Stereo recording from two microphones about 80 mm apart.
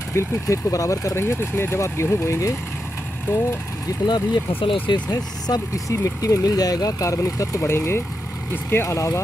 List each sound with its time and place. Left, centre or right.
0.1 s speech: left
4.1 s speech: left
5.1 s speech: left